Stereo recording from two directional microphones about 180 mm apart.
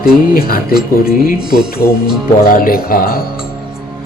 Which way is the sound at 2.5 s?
55° left (ahead or behind).